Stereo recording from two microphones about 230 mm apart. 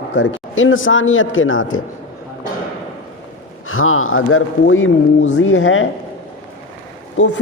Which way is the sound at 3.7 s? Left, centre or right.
Left.